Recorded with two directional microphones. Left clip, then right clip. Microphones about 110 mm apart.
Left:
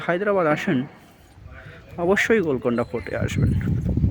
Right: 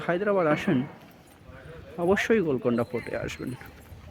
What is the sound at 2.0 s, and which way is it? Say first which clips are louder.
Speech: left 4 dB; 35° left (ahead or behind).